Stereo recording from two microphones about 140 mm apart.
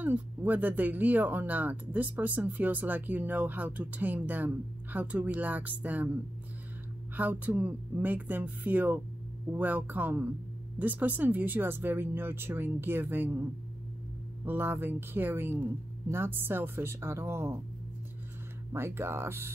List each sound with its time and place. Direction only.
0.0 s speech: 15° right (ahead or behind)
7.2 s speech: 10° right (ahead or behind)
18.7 s speech: 15° right (ahead or behind)